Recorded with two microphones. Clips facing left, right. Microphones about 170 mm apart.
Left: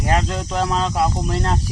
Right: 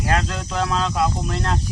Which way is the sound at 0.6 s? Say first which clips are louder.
Left 1 dB; 25° left (ahead or behind).